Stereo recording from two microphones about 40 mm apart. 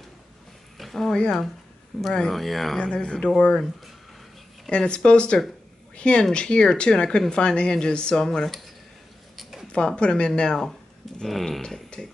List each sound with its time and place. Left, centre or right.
0.7 s a sound: centre
1.9 s speech: centre
2.8 s speech: left
4.6 s speech: left
9.4 s zipper: centre
9.7 s speech: left
11.2 s speech: centre
11.6 s speech: centre